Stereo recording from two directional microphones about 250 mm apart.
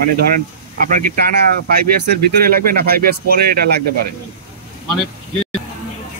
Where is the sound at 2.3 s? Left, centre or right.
Right.